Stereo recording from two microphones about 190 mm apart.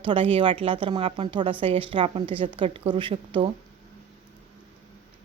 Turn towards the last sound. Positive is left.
turn(degrees=-25)  # may be behind; listen again after turning